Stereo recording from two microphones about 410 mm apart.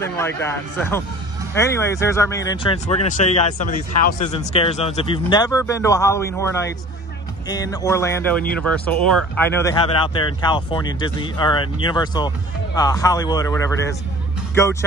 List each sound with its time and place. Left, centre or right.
0.0 s speech: centre